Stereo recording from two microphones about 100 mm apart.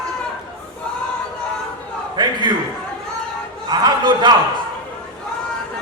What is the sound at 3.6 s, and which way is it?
Speech, 40° right (ahead or behind).